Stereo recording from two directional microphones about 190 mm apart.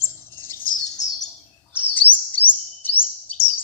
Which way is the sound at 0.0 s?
10° left (ahead or behind).